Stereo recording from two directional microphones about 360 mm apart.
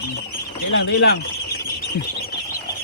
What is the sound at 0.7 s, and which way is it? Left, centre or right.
Speech, left.